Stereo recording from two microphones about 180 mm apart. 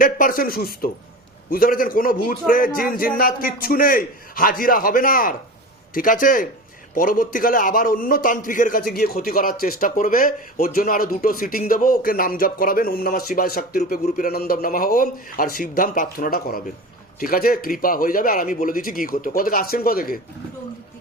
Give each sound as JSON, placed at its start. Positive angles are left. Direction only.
{"t": 0.0, "sound": "a man's voice", "side_deg": 50}